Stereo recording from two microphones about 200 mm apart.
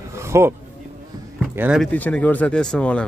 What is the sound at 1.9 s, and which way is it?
Speech, 10° left (ahead or behind).